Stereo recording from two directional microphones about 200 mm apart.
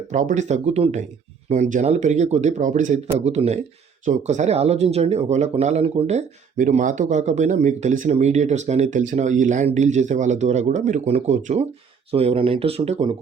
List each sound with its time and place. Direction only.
0.1 s speech: 40° right (ahead or behind)